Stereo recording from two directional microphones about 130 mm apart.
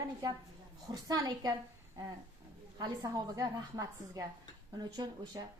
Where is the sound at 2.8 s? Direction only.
30° right (ahead or behind).